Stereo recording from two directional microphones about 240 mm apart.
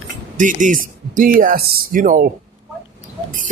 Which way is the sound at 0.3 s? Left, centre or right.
Right.